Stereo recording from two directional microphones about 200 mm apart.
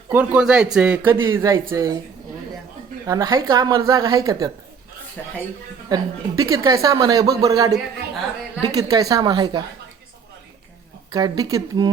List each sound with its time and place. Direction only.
0.1 s speech: 5° right (ahead or behind)
3.1 s speech: 15° right (ahead or behind)
5.9 s a woman's voice: 15° right (ahead or behind)
11.1 s a woman's voice: 20° right (ahead or behind)